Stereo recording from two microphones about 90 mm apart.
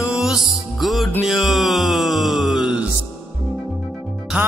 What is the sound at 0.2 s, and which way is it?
Music, centre (ahead or behind).